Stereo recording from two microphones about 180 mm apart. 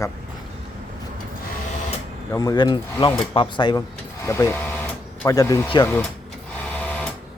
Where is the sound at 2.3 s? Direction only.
20° left (ahead or behind).